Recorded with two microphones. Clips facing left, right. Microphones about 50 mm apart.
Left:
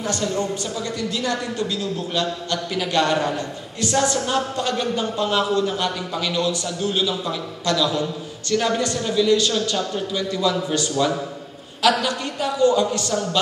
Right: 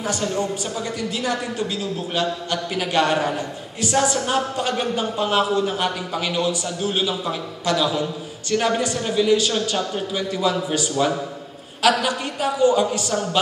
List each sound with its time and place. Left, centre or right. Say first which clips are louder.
0.0 s a man's voice: even; centre